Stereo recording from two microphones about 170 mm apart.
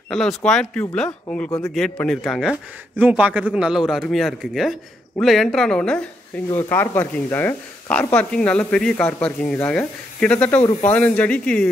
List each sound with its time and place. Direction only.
0.1 s a man's voice: centre (ahead or behind)